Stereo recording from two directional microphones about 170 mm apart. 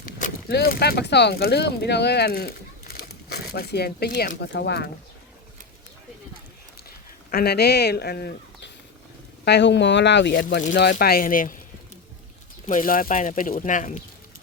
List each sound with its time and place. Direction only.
0.4 s speech: 65° left (ahead or behind); by 4.9 s 85° left
7.3 s speech: 70° left (ahead or behind)
9.4 s speech: 85° left
10.9 s speech: 60° left (ahead or behind)
12.6 s speech: 50° left (ahead or behind)